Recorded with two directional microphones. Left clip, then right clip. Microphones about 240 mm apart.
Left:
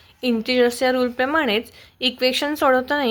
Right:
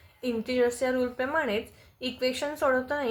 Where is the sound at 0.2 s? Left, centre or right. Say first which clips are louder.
Left 8 dB; left.